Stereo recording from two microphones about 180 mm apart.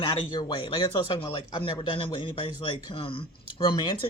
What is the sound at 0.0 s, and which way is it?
Speech, 25° left (ahead or behind).